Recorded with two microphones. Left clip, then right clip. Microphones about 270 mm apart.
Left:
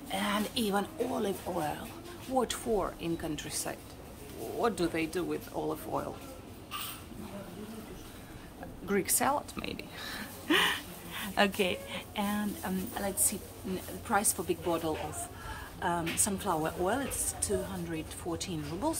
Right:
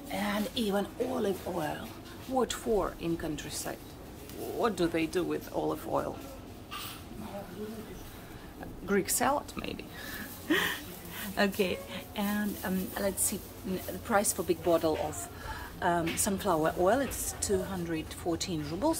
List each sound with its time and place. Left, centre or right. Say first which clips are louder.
0.1 s a woman's voice: left 1 dB; centre
8.8 s a woman's voice: right 1 dB; centre